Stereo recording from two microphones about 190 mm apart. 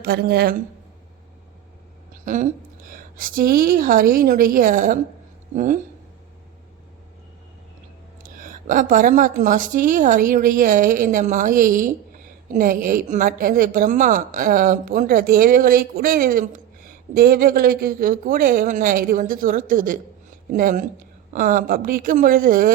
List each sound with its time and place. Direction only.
0.0 s speech: 55° right (ahead or behind)
2.2 s a woman's voice: 40° right (ahead or behind)
8.2 s a woman's voice: 45° right (ahead or behind)